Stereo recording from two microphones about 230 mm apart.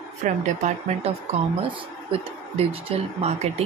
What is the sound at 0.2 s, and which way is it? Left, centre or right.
Speech, right.